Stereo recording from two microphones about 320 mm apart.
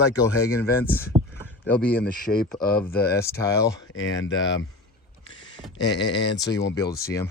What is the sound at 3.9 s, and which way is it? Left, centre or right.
Speech, left.